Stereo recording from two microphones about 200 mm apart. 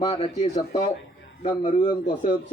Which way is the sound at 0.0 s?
30° left (ahead or behind).